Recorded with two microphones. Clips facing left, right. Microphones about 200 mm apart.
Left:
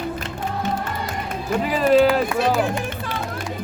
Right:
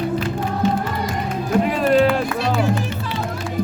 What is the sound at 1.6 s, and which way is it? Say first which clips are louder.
Music: left 1 dB; centre (ahead or behind).